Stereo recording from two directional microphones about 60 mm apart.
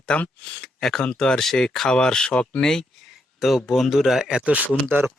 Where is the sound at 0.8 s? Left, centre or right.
Centre.